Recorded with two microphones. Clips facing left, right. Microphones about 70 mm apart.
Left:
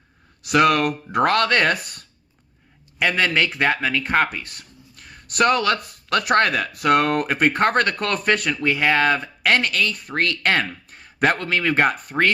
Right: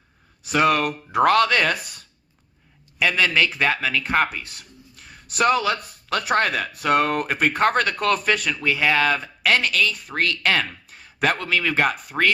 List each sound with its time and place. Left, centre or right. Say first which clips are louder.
0.4 s speech: left 2 dB; left
3.0 s speech: even; left